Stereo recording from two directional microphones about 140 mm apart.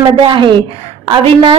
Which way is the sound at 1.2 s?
40° right (ahead or behind).